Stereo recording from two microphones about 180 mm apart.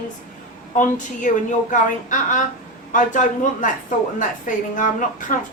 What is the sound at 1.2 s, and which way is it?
A woman's voice, 45° left (ahead or behind).